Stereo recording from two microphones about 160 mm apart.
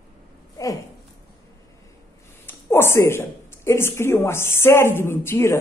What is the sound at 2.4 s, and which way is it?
A woman's voice, 15° left (ahead or behind).